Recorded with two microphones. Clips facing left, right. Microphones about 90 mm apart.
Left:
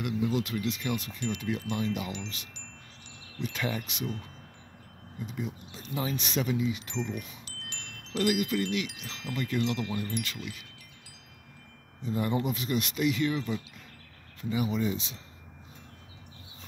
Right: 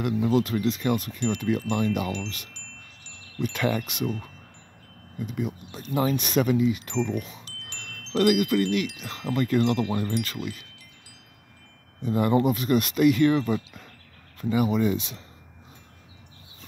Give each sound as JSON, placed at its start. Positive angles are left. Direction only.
{"t": 0.0, "sound": "chime", "side_deg": -45}
{"t": 1.7, "sound": "speech", "side_deg": -60}
{"t": 5.2, "sound": "speech", "side_deg": -55}
{"t": 8.2, "sound": "chime", "side_deg": -60}
{"t": 12.0, "sound": "chime", "side_deg": -60}
{"t": 14.4, "sound": "speech", "side_deg": -60}